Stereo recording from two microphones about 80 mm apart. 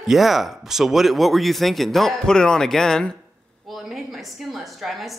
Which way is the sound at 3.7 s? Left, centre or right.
Centre.